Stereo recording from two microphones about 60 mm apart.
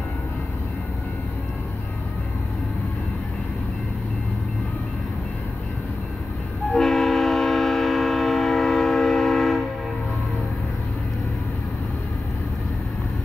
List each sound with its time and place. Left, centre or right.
6.7 s train: centre